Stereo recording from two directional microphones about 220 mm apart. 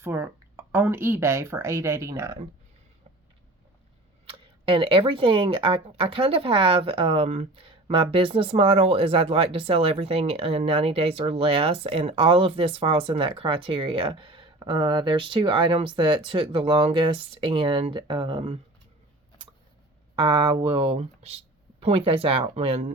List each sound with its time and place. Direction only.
0.0 s speech: 10° right (ahead or behind)
4.3 s speech: 25° right (ahead or behind)
20.1 s speech: 20° right (ahead or behind)